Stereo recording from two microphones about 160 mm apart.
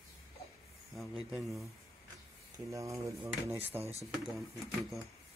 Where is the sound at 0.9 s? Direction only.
Centre (ahead or behind).